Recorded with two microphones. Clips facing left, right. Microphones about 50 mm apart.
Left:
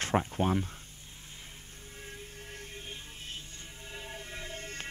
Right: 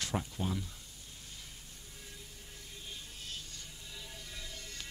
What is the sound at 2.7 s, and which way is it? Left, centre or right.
Music, left.